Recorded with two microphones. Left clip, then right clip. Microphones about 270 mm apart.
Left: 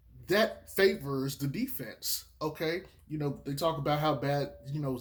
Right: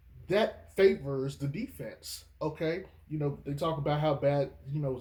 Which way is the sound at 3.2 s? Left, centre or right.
Left.